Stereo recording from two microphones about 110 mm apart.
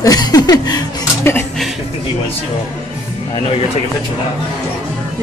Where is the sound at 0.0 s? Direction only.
35° left (ahead or behind).